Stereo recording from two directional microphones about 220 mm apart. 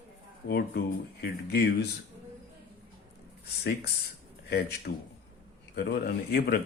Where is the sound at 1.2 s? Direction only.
45° left (ahead or behind).